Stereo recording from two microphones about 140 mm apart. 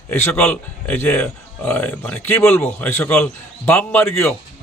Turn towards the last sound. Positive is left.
turn(degrees=15)  # may be behind; listen again after turning